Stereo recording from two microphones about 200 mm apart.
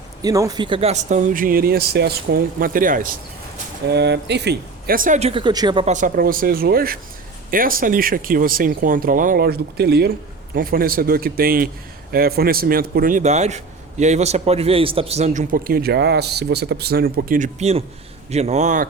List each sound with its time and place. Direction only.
0.2 s speech: 20° right (ahead or behind); by 3.2 s 45° right (ahead or behind)
3.8 s speech: 55° right (ahead or behind); by 5.3 s 40° right (ahead or behind)
5.3 s speech: 25° right (ahead or behind)
5.8 s a man's voice: 40° right (ahead or behind)